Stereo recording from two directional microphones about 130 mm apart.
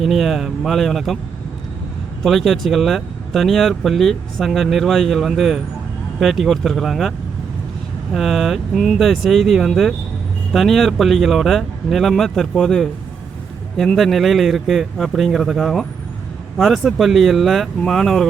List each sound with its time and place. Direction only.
0.0 s speech: centre (ahead or behind)
2.2 s speech: centre (ahead or behind)
8.1 s speech: centre (ahead or behind)